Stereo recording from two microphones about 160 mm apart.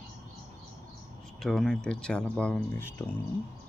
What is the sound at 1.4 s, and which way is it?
Speech, centre (ahead or behind).